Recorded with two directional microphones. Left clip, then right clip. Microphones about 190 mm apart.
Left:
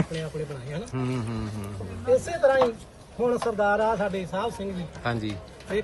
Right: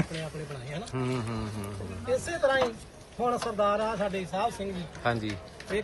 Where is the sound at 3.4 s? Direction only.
Centre (ahead or behind).